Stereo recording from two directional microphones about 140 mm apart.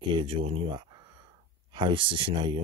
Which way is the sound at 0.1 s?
40° right (ahead or behind).